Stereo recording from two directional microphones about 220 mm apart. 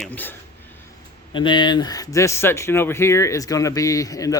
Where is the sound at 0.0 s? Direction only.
10° left (ahead or behind).